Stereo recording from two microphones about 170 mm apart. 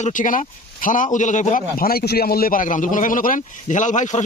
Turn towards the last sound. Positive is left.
turn(degrees=45)  # may be behind; listen again after turning